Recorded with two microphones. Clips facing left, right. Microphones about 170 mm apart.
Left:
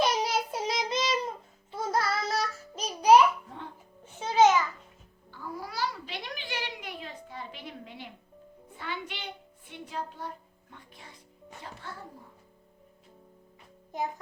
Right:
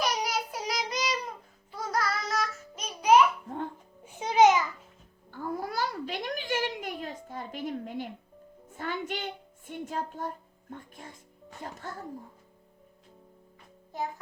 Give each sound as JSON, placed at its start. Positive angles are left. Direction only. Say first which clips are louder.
{"t": 0.0, "sound": "child singing", "louder": "left 3 dB", "side_deg": 25}
{"t": 4.0, "sound": "music", "louder": "right 1 dB", "side_deg": -15}
{"t": 5.3, "sound": "a sound", "louder": "right 5 dB", "side_deg": -50}
{"t": 8.7, "sound": "child singing", "louder": "right 5 dB", "side_deg": -45}
{"t": 11.6, "sound": "a child's voice", "louder": "right 4 dB", "side_deg": -45}
{"t": 13.9, "sound": "music", "louder": "left 1 dB", "side_deg": 20}